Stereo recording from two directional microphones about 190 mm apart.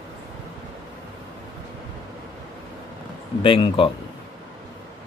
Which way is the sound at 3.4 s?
25° left (ahead or behind).